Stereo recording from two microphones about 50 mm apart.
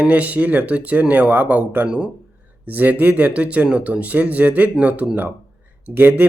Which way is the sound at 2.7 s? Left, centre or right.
Right.